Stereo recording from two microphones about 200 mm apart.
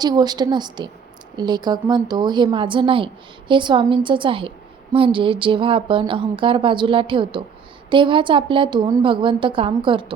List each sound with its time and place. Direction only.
0.0 s a woman's voice: 20° right (ahead or behind)